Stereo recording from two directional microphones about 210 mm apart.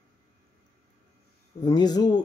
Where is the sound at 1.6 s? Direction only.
20° left (ahead or behind).